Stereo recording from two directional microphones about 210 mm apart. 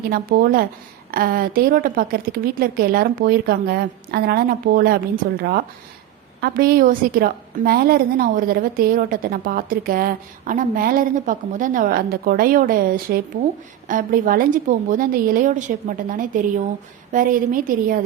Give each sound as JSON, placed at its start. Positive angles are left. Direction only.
{"t": 0.1, "sound": "a woman's voice", "side_deg": -45}